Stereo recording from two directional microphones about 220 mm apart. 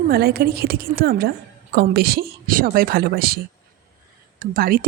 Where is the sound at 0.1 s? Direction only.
45° right (ahead or behind).